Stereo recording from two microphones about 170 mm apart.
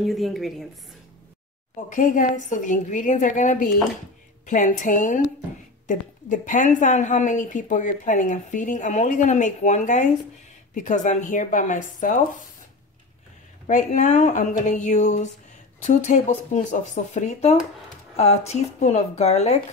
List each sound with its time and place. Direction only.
0.0 s a woman's voice: centre (ahead or behind)
2.0 s a woman's voice: 50° left (ahead or behind)
13.7 s a woman's voice: 50° left (ahead or behind)